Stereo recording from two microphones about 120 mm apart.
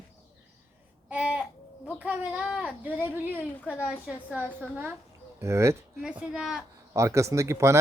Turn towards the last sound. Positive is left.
turn(degrees=-25)  # may be behind; listen again after turning